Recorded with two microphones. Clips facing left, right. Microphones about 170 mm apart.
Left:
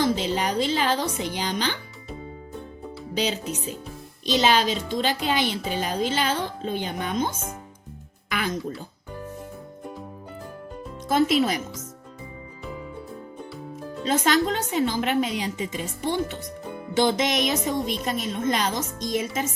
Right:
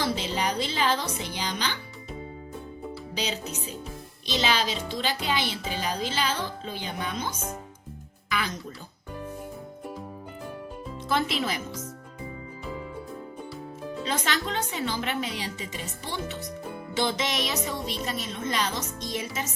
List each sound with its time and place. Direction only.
0.0 s speech: 45° left (ahead or behind)
3.2 s speech: 50° left (ahead or behind)
8.3 s music: 50° left (ahead or behind)
14.1 s speech: 45° left (ahead or behind)